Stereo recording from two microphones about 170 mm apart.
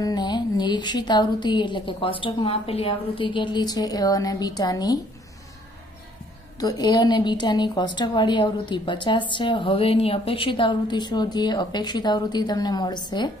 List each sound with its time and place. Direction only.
0.0 s a woman's voice: 25° left (ahead or behind)
6.6 s a woman's voice: 25° left (ahead or behind)